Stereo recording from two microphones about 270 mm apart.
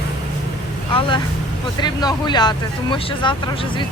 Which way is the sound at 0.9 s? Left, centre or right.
Centre.